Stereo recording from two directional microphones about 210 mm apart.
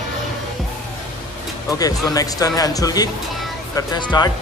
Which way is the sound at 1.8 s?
15° left (ahead or behind).